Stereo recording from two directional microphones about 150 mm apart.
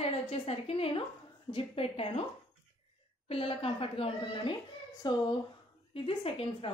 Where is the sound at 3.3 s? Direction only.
40° left (ahead or behind).